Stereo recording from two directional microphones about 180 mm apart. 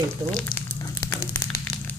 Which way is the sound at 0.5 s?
15° left (ahead or behind).